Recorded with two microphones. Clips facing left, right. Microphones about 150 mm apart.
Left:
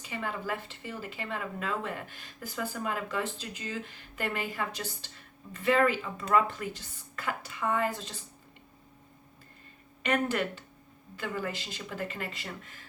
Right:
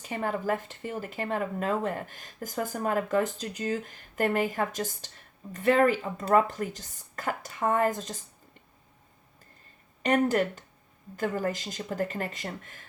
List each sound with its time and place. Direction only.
0.0 s speech: 45° right (ahead or behind)
10.0 s speech: 40° right (ahead or behind)